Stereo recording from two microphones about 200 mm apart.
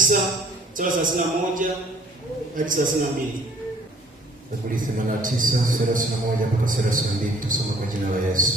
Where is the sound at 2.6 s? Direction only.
40° right (ahead or behind).